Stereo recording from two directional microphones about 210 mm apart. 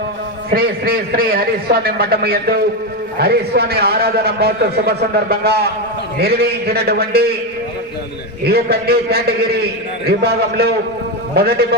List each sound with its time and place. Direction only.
0.5 s a man's voice: 45° right (ahead or behind)
8.4 s a man's voice: 50° right (ahead or behind)